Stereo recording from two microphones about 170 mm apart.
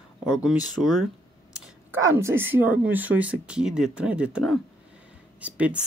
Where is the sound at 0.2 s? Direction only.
5° right (ahead or behind).